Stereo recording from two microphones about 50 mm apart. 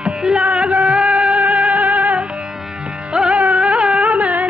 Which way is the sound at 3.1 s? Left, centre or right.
Centre.